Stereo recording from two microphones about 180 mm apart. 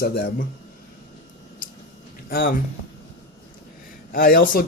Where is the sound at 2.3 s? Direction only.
55° left (ahead or behind).